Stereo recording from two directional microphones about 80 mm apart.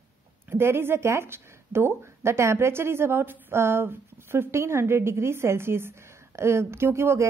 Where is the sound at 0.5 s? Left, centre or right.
Right.